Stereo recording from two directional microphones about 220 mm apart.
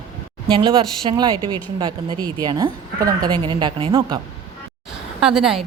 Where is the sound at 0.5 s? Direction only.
20° right (ahead or behind).